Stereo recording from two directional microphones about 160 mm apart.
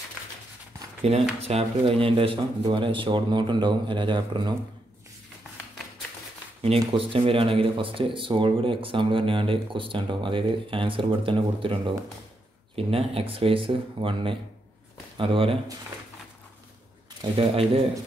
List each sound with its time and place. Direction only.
1.0 s speech: 40° right (ahead or behind)
6.6 s speech: 35° right (ahead or behind)
17.2 s speech: 35° right (ahead or behind)